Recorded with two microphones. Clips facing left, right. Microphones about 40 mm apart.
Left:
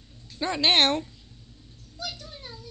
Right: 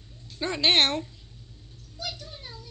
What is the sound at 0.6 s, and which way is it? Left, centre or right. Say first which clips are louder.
Speech: even; centre.